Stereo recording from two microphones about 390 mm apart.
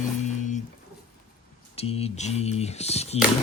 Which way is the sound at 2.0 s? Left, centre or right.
Centre.